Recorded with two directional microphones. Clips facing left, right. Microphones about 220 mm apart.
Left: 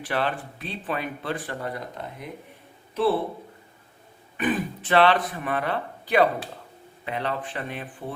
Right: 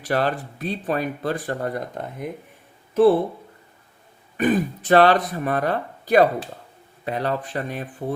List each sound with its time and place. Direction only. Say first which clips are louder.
0.0 s speech: right 4 dB; 40° right (ahead or behind)
4.4 s speech: right 5 dB; 40° right (ahead or behind)